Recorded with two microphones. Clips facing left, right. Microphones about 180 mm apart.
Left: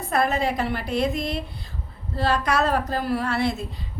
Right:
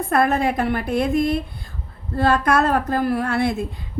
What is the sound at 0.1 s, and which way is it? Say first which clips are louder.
A woman's voice: right 3 dB; 55° right (ahead or behind).